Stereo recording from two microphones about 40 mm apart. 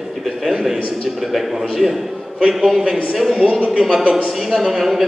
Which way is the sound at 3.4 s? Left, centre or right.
Right.